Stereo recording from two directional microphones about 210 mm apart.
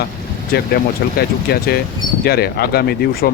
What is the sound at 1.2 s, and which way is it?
Speech, 50° left (ahead or behind).